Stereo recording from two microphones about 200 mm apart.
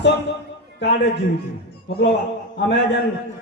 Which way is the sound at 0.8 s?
60° left (ahead or behind).